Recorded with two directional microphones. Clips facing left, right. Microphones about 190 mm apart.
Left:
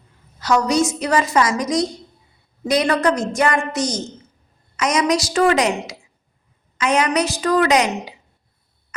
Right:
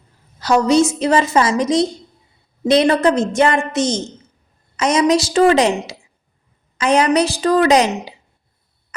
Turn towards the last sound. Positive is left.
turn(degrees=-30)  # may be behind; listen again after turning